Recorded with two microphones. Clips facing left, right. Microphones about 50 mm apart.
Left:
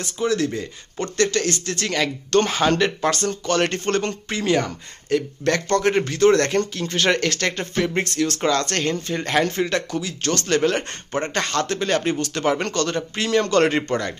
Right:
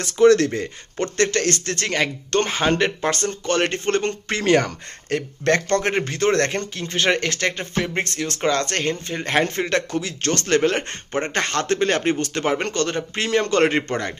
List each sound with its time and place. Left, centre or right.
0.0 s speech: right
0.5 s speech: right
4.3 s a man's voice: right